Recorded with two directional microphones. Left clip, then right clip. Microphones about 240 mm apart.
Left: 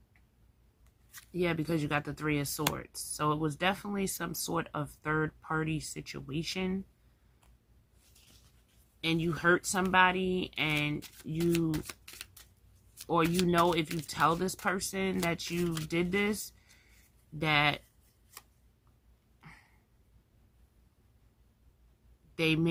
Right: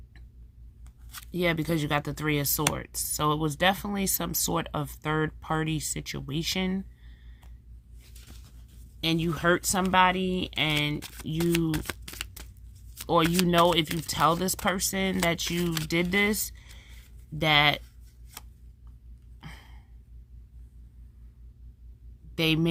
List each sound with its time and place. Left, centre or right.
1.3 s speech: right
9.0 s speech: right
19.4 s a sound: right
22.4 s speech: right